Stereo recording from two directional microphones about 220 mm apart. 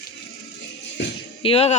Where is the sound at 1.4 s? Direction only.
25° left (ahead or behind).